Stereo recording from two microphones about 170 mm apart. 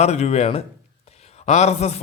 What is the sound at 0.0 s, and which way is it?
A man's voice, 40° left (ahead or behind).